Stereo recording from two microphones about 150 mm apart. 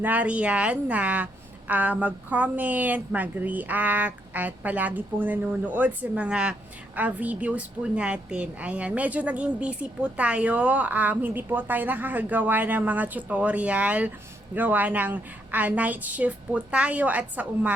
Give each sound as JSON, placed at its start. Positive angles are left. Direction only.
{"t": 0.0, "sound": "a woman's voice", "side_deg": -10}